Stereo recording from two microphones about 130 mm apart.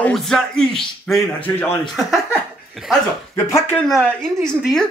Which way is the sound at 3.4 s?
20° left (ahead or behind).